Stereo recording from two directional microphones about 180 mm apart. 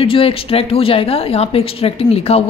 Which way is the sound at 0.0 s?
30° left (ahead or behind).